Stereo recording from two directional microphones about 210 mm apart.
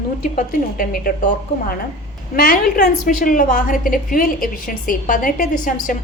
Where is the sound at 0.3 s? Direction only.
40° left (ahead or behind).